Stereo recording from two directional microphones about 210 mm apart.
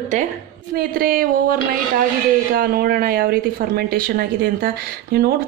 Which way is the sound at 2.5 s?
45° right (ahead or behind).